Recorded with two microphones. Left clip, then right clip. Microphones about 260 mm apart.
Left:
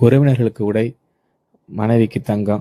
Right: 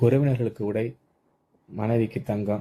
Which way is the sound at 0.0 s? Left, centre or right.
Left.